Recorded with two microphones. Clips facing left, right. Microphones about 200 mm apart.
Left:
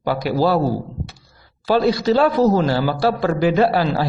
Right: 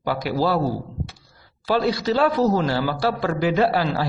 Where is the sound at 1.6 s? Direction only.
35° left (ahead or behind).